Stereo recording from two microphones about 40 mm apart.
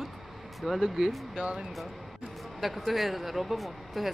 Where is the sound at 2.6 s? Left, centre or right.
Centre.